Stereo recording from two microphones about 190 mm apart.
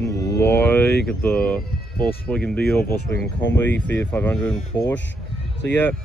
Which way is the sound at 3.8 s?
10° left (ahead or behind).